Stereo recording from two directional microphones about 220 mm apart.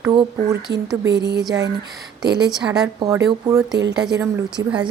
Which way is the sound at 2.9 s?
15° right (ahead or behind).